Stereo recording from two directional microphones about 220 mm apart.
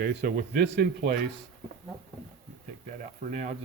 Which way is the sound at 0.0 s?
45° right (ahead or behind).